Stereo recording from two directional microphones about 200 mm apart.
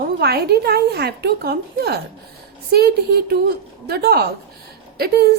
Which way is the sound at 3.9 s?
50° right (ahead or behind).